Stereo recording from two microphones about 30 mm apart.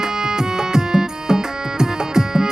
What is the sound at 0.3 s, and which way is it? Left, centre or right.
Music, right.